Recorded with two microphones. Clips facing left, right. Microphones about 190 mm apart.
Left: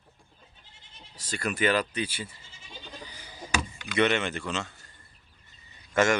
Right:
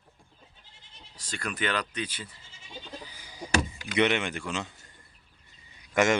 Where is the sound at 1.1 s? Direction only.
5° left (ahead or behind).